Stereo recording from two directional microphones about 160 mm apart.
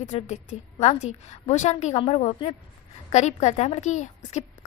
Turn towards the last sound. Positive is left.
turn(degrees=45)  # may be behind; listen again after turning